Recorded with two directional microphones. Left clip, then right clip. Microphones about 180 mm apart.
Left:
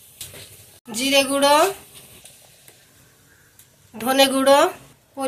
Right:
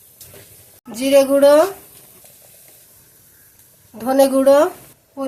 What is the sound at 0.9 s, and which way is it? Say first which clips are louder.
Speech: right 6 dB; 45° right (ahead or behind).